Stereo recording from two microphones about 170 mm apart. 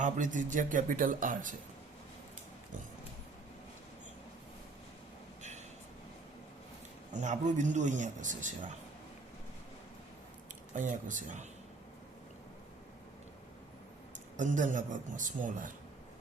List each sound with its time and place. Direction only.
0.0 s a man's voice: 50° right (ahead or behind)
7.1 s a man's voice: 45° right (ahead or behind)
10.8 s a man's voice: 50° right (ahead or behind)
14.3 s a man's voice: 50° right (ahead or behind)